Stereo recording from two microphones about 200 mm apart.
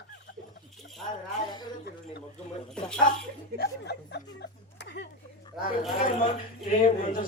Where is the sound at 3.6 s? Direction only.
55° left (ahead or behind).